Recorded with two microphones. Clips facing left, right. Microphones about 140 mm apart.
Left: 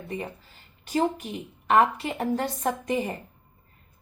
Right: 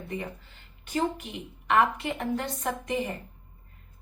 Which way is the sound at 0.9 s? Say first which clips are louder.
Left 3 dB; 35° left (ahead or behind).